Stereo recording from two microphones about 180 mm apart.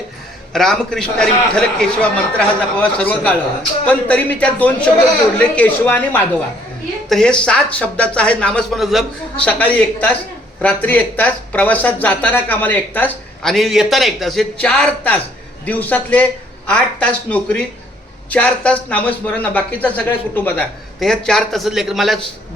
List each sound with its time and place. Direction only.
0.5 s a man's voice: centre (ahead or behind)